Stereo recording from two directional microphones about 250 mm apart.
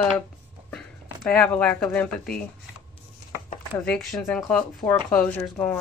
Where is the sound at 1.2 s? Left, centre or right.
Centre.